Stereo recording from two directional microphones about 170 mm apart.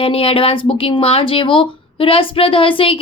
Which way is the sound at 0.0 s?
35° left (ahead or behind).